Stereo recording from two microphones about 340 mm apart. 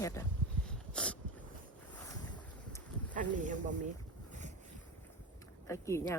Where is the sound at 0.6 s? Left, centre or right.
Centre.